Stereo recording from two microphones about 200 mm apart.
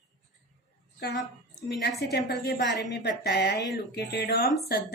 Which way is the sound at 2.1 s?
55° left (ahead or behind).